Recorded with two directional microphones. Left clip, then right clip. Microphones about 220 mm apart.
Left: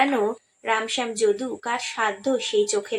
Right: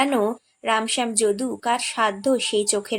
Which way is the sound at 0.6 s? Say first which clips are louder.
Right 2 dB; 50° right (ahead or behind).